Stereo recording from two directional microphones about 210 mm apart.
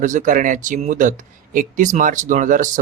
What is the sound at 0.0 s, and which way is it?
Speech, 40° right (ahead or behind).